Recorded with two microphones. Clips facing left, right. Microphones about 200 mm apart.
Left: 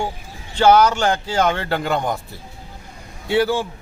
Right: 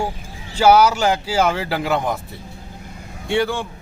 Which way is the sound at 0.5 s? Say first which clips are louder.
Even; 10° right (ahead or behind).